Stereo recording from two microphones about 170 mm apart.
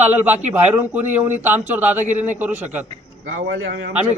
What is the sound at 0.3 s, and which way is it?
Speech, 40° right (ahead or behind).